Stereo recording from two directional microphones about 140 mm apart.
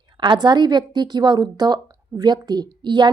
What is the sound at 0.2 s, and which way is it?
A woman's voice, 30° right (ahead or behind).